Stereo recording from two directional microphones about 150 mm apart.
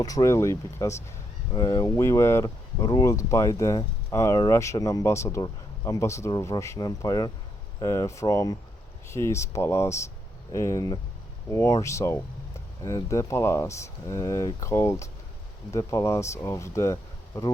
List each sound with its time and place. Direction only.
0.0 s speech: 25° left (ahead or behind)